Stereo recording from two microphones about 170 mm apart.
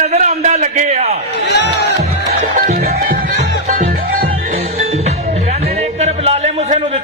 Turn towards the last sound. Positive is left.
turn(degrees=-40)  # may be behind; listen again after turning